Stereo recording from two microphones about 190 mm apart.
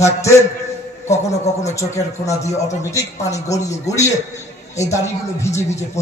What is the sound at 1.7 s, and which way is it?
A man's voice, 15° left (ahead or behind).